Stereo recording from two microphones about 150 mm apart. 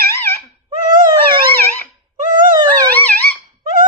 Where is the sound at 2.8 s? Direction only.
10° left (ahead or behind).